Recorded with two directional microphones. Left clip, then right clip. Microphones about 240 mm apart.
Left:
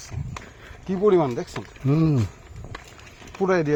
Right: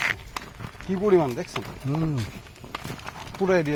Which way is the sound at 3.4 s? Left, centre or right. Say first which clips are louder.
Left 1 dB; left.